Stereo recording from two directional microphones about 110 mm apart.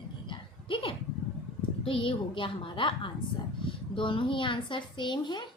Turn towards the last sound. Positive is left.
turn(degrees=45)  # may be behind; listen again after turning